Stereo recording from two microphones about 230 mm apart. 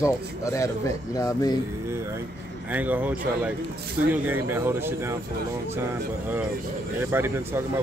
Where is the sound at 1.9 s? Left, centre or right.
Centre.